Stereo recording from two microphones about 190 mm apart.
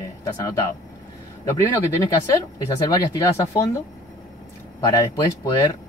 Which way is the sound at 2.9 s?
20° left (ahead or behind).